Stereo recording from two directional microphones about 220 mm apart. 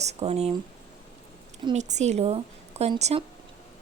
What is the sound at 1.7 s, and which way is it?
Speech, 30° right (ahead or behind).